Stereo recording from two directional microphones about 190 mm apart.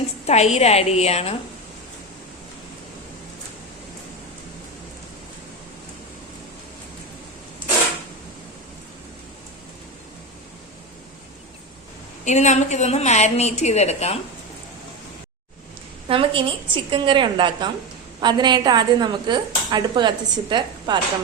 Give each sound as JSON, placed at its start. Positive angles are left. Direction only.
{"t": 0.3, "sound": "a woman's voice", "side_deg": 35}
{"t": 12.2, "sound": "a woman's voice", "side_deg": 40}
{"t": 16.0, "sound": "a woman's voice", "side_deg": -30}